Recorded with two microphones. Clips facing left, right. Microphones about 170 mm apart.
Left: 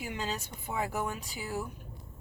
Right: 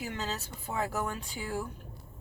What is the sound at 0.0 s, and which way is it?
Speech, 15° left (ahead or behind).